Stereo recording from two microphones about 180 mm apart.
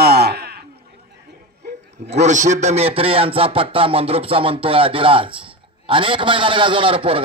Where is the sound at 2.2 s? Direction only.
40° right (ahead or behind).